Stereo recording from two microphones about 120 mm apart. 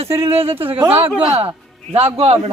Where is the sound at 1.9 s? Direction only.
60° right (ahead or behind).